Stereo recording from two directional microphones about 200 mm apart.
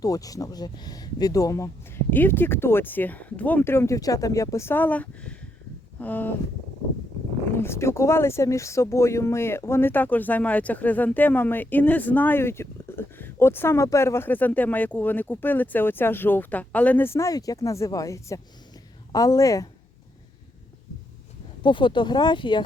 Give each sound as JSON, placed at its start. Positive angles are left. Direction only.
{"t": 0.0, "sound": "speech", "side_deg": 15}
{"t": 7.5, "sound": "speech", "side_deg": 10}
{"t": 21.6, "sound": "speech", "side_deg": 25}